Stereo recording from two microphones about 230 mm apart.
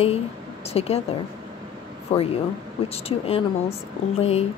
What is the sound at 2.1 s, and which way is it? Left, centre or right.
Speech, left.